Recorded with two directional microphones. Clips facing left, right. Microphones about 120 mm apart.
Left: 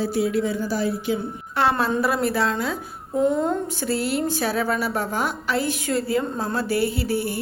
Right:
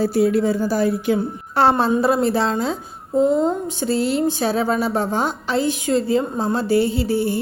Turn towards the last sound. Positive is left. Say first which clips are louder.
# right 5 dB
turn(degrees=-25)  # may be behind; listen again after turning